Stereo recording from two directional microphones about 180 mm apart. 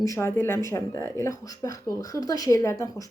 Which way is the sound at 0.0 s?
15° left (ahead or behind).